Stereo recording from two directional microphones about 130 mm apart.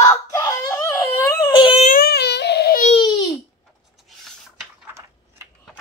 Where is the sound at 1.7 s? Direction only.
70° left (ahead or behind).